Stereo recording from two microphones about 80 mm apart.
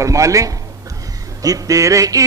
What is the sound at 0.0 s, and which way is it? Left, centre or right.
Speech, right.